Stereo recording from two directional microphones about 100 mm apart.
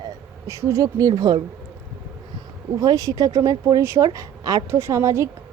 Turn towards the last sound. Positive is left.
turn(degrees=-30)  # may be behind; listen again after turning